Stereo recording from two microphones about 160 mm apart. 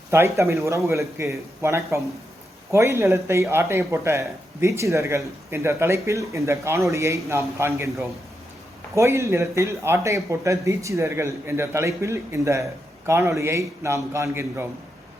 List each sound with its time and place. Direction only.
0.1 s speech: 15° right (ahead or behind)
9.0 s speech: 15° right (ahead or behind)